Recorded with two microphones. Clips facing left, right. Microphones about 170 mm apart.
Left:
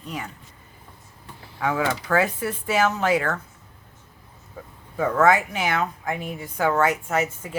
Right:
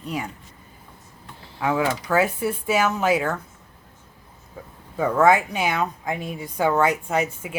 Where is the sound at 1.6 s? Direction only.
20° right (ahead or behind).